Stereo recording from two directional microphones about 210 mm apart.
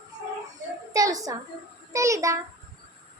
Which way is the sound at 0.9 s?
15° right (ahead or behind).